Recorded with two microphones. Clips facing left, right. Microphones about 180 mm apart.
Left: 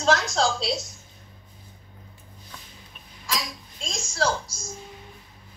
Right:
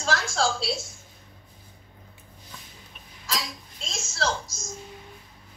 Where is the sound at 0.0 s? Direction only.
20° left (ahead or behind).